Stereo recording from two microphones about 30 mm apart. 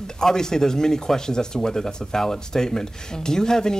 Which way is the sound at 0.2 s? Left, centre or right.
Centre.